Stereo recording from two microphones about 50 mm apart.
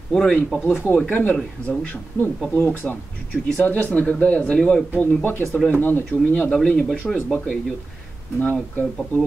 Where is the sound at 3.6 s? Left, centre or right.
Left; by 4.8 s centre.